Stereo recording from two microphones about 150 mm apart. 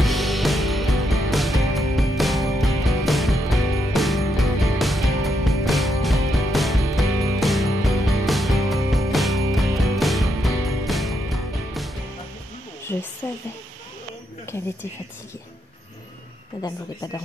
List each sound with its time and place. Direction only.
0.0 s music: centre (ahead or behind)
16.6 s speech: 25° left (ahead or behind)